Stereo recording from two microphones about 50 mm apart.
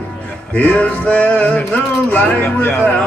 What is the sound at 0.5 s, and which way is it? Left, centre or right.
Music, left.